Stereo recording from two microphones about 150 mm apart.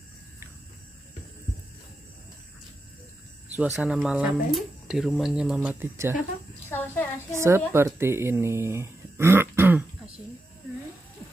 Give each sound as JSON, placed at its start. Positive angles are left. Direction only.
{"t": 3.5, "sound": "speech", "side_deg": -5}
{"t": 6.7, "sound": "a sound", "side_deg": 15}
{"t": 7.3, "sound": "speech", "side_deg": -15}